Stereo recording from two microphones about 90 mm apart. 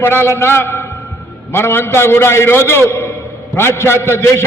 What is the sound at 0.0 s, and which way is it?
A man's voice, 25° left (ahead or behind).